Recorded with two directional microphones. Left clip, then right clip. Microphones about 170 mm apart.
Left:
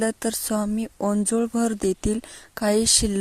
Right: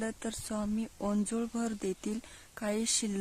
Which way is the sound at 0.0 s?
30° left (ahead or behind).